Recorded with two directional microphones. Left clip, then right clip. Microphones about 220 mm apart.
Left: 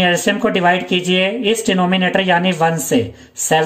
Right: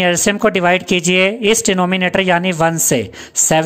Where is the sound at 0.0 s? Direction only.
40° right (ahead or behind).